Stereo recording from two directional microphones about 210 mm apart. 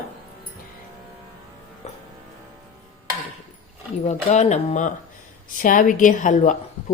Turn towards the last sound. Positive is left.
turn(degrees=35)  # may be behind; listen again after turning